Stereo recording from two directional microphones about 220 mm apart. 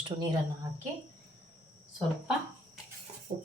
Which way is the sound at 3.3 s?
30° right (ahead or behind).